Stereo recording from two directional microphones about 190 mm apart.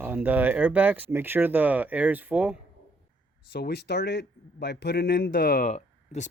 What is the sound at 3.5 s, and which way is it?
Speech, 60° left (ahead or behind).